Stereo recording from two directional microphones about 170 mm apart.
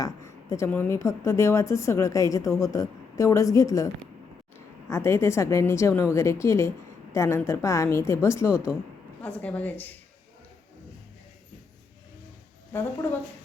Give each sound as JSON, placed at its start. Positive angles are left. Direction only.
{"t": 0.0, "sound": "a woman's voice", "side_deg": 20}
{"t": 12.7, "sound": "a woman's voice", "side_deg": 10}